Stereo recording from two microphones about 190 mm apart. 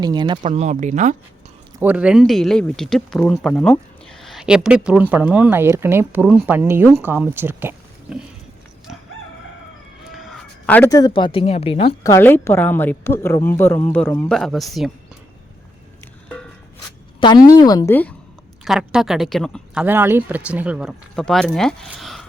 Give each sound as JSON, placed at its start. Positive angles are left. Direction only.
{"t": 0.0, "sound": "speech", "side_deg": -25}
{"t": 1.8, "sound": "speech", "side_deg": -5}
{"t": 8.9, "sound": "crowing", "side_deg": -5}
{"t": 10.1, "sound": "speech", "side_deg": 0}
{"t": 12.1, "sound": "a woman's voice", "side_deg": 10}
{"t": 17.2, "sound": "speech", "side_deg": 25}
{"t": 18.6, "sound": "speech", "side_deg": -5}